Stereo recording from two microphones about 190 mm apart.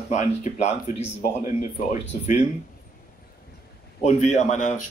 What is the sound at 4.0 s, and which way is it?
Speech, 35° left (ahead or behind).